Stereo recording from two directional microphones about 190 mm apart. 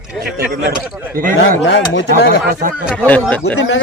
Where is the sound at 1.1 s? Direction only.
45° right (ahead or behind).